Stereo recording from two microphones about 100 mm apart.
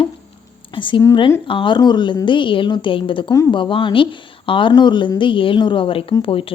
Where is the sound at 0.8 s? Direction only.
55° left (ahead or behind).